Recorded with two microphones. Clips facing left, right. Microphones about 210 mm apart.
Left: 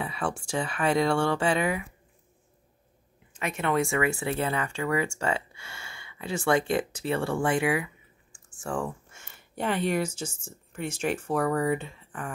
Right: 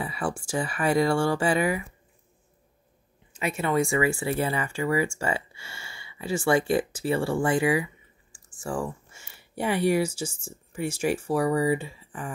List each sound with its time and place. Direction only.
0.0 s speech: 5° right (ahead or behind)
3.3 s speech: 5° right (ahead or behind)
8.6 s a sound: 5° right (ahead or behind)
9.6 s speech: 10° right (ahead or behind)